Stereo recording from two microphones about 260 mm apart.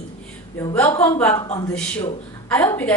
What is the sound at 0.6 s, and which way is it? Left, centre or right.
Speech, centre.